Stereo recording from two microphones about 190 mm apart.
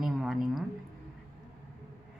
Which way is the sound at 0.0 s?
Centre (ahead or behind).